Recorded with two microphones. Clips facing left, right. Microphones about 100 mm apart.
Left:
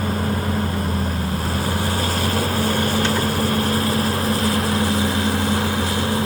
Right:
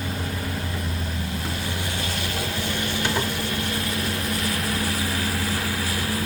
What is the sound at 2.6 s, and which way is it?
Vehicle, 40° left (ahead or behind).